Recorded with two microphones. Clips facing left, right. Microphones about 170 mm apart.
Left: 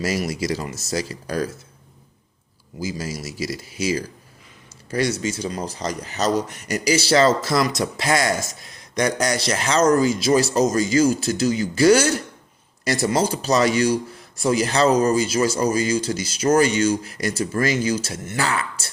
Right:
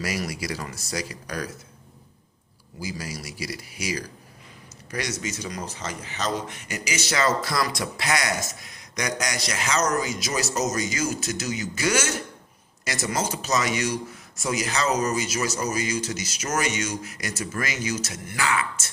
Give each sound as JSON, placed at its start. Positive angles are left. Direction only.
{"t": 0.0, "sound": "speech", "side_deg": 25}
{"t": 2.8, "sound": "speech", "side_deg": 25}